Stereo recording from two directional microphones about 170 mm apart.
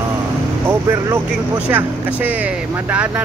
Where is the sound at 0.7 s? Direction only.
15° right (ahead or behind).